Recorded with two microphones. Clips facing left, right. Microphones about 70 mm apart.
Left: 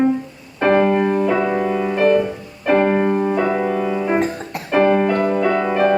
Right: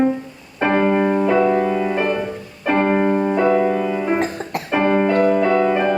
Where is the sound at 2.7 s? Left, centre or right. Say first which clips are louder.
Left 1 dB; centre.